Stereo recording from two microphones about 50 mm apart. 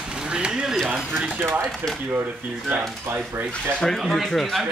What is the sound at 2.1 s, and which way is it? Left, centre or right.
Speech, right.